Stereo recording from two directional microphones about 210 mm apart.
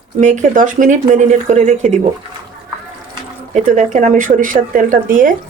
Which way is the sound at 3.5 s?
35° right (ahead or behind).